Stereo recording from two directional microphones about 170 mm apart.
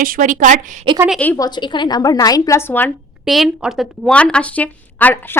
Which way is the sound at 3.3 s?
5° right (ahead or behind).